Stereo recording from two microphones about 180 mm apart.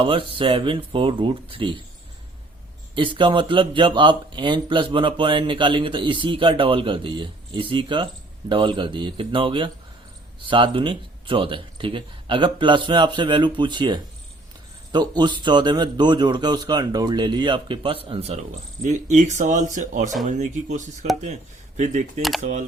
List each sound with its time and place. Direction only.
0.0 s a man's voice: 30° right (ahead or behind)
2.9 s a man's voice: 25° right (ahead or behind); by 22.6 s 45° right (ahead or behind)